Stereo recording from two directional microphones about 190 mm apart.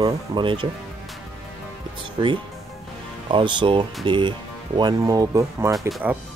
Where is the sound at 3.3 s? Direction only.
25° right (ahead or behind).